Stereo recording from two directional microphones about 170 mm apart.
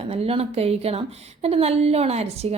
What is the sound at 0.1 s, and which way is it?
A woman's voice, 35° right (ahead or behind).